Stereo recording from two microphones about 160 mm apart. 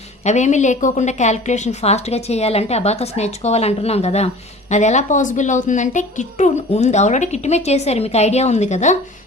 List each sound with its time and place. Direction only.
0.3 s a woman's voice: 45° left (ahead or behind)